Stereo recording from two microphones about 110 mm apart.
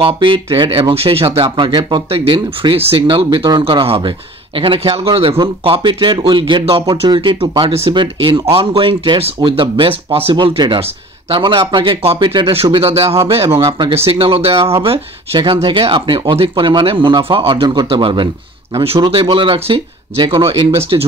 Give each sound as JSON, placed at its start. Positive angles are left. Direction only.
{"t": 0.0, "sound": "speech", "side_deg": -50}
{"t": 2.0, "sound": "speech", "side_deg": -55}
{"t": 7.9, "sound": "speech", "side_deg": -45}
{"t": 10.3, "sound": "speech", "side_deg": -45}
{"t": 12.0, "sound": "speech", "side_deg": -60}
{"t": 13.7, "sound": "speech", "side_deg": -45}
{"t": 13.9, "sound": "speech", "side_deg": -60}
{"t": 18.8, "sound": "speech", "side_deg": -55}